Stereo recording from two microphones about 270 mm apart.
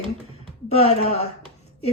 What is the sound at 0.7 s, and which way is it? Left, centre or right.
Speech, left.